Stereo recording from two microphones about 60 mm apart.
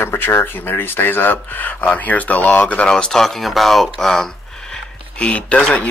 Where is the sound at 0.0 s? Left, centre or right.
Left.